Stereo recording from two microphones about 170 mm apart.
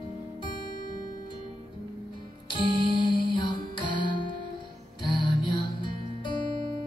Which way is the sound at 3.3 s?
30° left (ahead or behind).